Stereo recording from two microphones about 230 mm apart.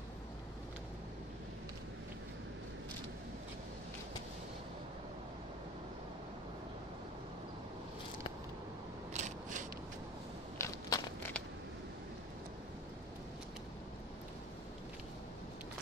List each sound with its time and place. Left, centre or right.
9.1 s scissors: right
10.6 s crackle: centre